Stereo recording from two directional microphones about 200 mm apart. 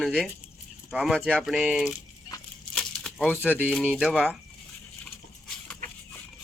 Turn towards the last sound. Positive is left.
turn(degrees=5)  # may be behind; listen again after turning